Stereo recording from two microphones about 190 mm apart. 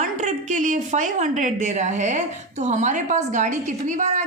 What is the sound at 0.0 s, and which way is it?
A woman's voice, 40° right (ahead or behind).